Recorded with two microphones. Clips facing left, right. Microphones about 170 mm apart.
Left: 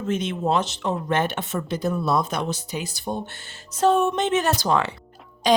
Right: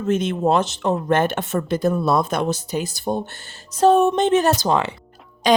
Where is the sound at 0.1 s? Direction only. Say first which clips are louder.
Right 5 dB; 50° right (ahead or behind).